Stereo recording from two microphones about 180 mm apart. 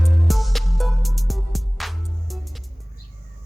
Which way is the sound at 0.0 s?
Centre (ahead or behind).